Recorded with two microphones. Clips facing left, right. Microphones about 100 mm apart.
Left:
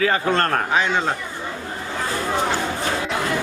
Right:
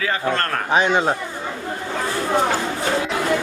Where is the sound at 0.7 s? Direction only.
20° right (ahead or behind).